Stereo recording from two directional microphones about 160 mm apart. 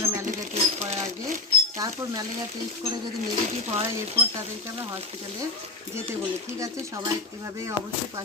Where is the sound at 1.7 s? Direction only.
20° right (ahead or behind).